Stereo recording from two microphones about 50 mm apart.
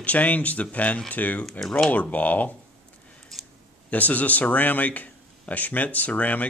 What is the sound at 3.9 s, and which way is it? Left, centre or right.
Speech, left.